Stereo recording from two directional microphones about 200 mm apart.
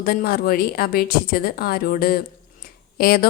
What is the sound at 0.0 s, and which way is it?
A woman's voice, 45° left (ahead or behind).